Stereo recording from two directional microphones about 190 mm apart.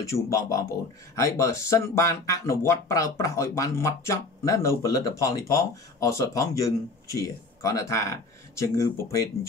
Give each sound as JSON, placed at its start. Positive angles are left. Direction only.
{"t": 0.0, "sound": "speech", "side_deg": 15}